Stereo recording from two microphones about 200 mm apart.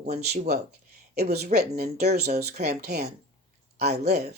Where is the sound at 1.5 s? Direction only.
50° right (ahead or behind).